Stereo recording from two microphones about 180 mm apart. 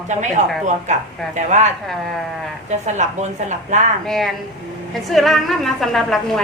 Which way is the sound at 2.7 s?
40° right (ahead or behind).